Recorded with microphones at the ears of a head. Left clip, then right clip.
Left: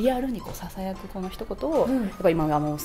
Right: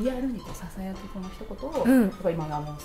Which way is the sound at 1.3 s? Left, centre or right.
Left.